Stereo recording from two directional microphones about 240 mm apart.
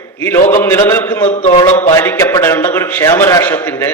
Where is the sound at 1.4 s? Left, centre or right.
Left.